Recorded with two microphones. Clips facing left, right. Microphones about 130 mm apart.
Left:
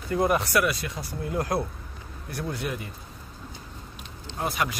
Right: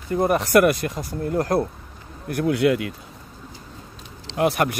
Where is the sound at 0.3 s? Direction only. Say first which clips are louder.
Right 7 dB; 50° right (ahead or behind).